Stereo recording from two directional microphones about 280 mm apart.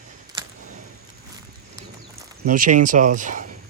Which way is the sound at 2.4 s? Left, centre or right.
Right.